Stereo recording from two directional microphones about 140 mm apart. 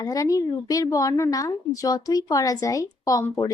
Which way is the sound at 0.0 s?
25° left (ahead or behind).